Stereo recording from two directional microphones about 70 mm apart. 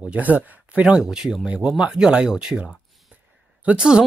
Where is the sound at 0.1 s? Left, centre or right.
Right.